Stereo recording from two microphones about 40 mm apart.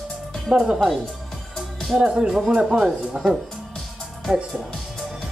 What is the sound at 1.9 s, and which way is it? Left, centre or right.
Speech, centre.